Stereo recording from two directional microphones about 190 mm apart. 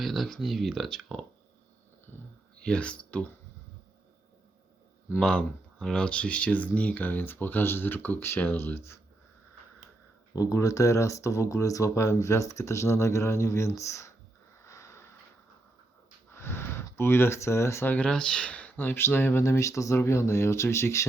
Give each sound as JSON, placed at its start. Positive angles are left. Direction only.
{"t": 0.0, "sound": "speech", "side_deg": 0}
{"t": 2.6, "sound": "speech", "side_deg": 5}
{"t": 5.2, "sound": "speech", "side_deg": 5}
{"t": 10.3, "sound": "speech", "side_deg": 15}
{"t": 14.6, "sound": "sniff", "side_deg": 15}
{"t": 16.3, "sound": "speech", "side_deg": 10}